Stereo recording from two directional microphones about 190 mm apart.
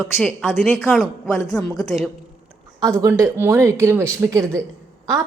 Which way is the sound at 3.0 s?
15° right (ahead or behind).